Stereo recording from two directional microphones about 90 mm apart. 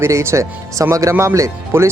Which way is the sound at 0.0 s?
30° right (ahead or behind).